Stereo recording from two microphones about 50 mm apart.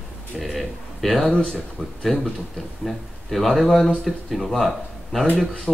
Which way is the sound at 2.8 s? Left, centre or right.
Centre.